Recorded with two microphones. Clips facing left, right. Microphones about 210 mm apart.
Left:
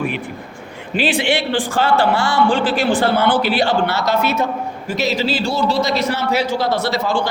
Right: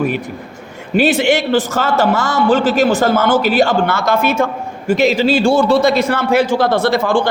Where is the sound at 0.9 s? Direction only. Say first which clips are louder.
Right 5 dB; 45° right (ahead or behind).